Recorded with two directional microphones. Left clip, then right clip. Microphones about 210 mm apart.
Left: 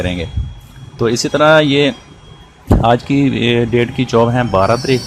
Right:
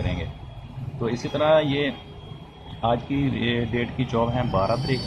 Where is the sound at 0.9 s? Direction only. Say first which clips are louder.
Left 12 dB; 45° left (ahead or behind).